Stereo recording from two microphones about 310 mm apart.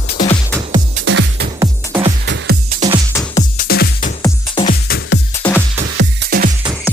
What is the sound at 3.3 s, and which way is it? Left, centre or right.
Music, left.